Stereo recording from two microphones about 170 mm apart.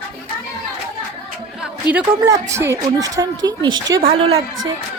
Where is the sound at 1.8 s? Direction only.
25° left (ahead or behind).